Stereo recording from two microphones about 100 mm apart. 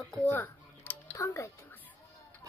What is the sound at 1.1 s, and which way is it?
Speech, 30° left (ahead or behind).